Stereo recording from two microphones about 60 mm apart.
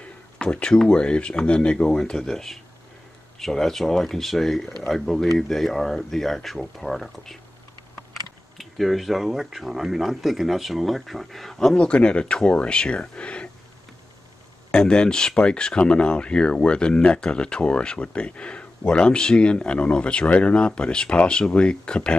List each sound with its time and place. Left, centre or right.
0.5 s speech: centre
8.5 s speech: centre
11.7 s speech: centre
14.7 s speech: centre